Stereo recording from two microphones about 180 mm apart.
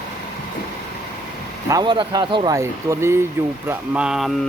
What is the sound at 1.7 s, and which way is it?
Speech, 25° right (ahead or behind).